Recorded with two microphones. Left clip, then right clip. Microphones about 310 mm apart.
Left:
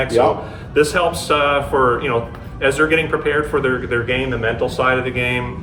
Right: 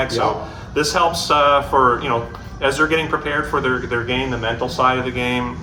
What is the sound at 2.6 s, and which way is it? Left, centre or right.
Speech, centre.